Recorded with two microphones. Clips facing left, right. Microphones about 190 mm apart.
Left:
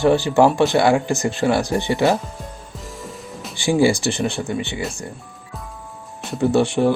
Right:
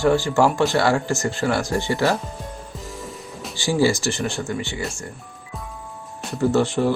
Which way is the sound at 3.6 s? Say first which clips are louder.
Left 3 dB; 15° left (ahead or behind).